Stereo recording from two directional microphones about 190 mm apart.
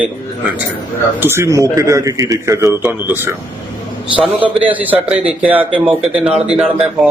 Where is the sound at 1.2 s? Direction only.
15° right (ahead or behind).